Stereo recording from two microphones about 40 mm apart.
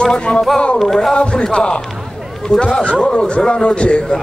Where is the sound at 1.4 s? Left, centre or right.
Centre.